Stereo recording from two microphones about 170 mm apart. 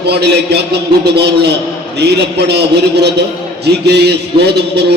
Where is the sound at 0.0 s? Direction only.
75° right (ahead or behind).